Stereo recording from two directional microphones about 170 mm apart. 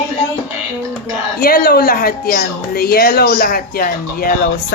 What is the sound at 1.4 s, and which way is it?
A woman's voice, 60° left (ahead or behind).